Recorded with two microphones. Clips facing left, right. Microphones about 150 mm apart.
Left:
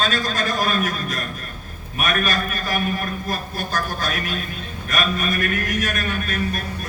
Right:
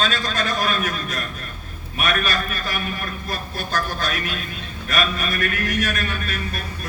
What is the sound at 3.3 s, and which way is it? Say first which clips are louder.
A man's voice: right 2 dB; 45° left (ahead or behind).